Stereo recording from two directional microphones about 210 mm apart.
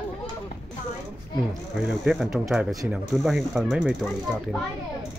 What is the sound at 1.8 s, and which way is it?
Speech, 5° right (ahead or behind).